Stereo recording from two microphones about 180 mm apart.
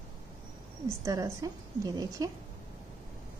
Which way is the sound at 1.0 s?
20° right (ahead or behind).